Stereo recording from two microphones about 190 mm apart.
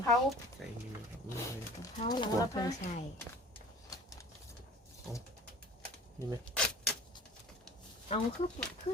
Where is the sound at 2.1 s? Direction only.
20° left (ahead or behind).